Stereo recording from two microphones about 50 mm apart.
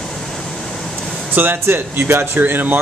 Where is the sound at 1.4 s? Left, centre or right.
Right.